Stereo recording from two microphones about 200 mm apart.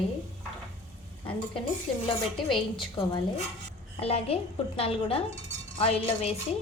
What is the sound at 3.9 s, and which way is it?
A woman's voice, 30° left (ahead or behind).